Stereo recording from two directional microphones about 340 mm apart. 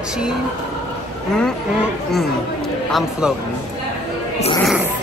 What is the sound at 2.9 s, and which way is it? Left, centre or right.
Speech, centre.